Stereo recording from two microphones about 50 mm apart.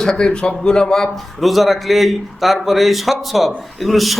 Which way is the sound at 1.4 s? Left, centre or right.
Centre.